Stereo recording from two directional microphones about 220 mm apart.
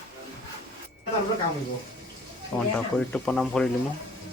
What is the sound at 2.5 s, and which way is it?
Speech, 5° left (ahead or behind).